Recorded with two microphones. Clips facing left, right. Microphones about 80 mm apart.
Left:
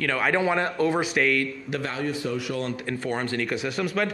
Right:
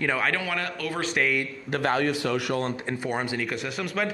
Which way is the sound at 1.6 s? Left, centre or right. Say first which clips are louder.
Right 4 dB; right.